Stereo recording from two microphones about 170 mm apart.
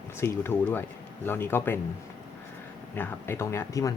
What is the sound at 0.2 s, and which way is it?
Speech, 15° left (ahead or behind).